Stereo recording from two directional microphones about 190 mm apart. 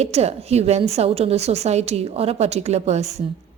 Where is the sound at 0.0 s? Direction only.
35° right (ahead or behind).